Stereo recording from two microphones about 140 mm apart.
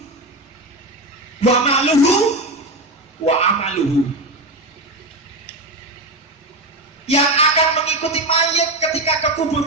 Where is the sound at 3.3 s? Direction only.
50° left (ahead or behind).